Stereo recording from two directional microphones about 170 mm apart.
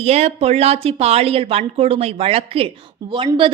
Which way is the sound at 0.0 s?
40° right (ahead or behind).